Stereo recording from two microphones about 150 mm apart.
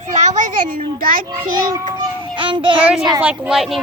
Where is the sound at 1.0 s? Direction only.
70° right (ahead or behind).